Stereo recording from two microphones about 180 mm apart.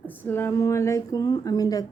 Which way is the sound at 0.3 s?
10° left (ahead or behind).